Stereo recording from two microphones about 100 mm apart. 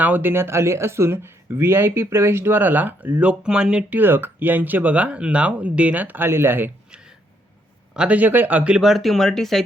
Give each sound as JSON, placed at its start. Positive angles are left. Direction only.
{"t": 0.0, "sound": "speech", "side_deg": -20}
{"t": 7.9, "sound": "speech", "side_deg": -15}